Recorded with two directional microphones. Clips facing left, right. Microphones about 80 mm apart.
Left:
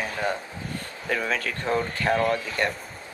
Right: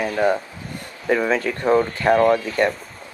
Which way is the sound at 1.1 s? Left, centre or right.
Right.